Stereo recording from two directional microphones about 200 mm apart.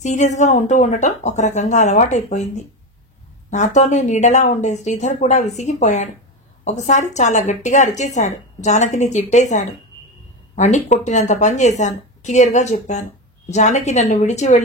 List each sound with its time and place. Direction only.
0.0 s a woman's voice: 35° left (ahead or behind)